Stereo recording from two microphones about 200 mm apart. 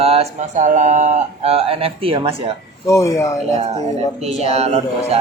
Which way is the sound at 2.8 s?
15° left (ahead or behind).